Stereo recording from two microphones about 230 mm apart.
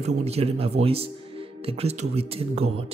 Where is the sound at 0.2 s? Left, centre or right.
Right.